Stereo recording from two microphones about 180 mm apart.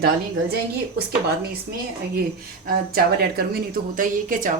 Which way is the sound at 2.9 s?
60° right (ahead or behind).